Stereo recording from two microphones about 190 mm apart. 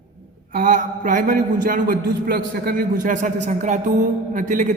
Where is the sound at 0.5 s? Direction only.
45° right (ahead or behind).